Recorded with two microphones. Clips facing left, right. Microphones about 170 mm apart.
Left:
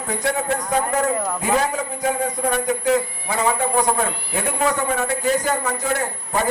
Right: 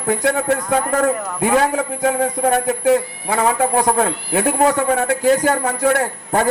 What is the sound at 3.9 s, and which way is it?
A man's voice, 65° right (ahead or behind).